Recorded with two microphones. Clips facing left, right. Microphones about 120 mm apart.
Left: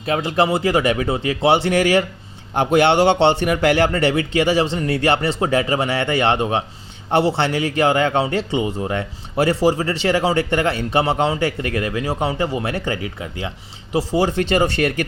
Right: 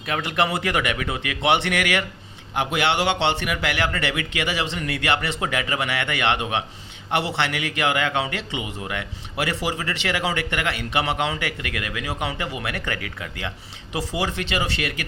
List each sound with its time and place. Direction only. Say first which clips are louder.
0.0 s a man's voice: left 5 dB; 30° left (ahead or behind)
13.9 s speech: left 8 dB; 40° left (ahead or behind)